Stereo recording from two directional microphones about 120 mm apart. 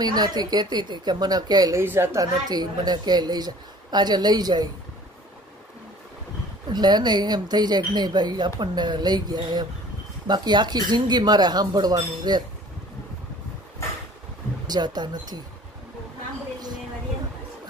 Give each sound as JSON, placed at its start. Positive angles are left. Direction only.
{"t": 0.0, "sound": "speech", "side_deg": -35}
{"t": 1.8, "sound": "speech", "side_deg": -20}
{"t": 6.7, "sound": "speech", "side_deg": -35}
{"t": 14.7, "sound": "speech", "side_deg": -35}